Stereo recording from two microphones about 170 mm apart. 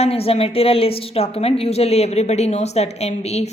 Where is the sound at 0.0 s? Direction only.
35° left (ahead or behind).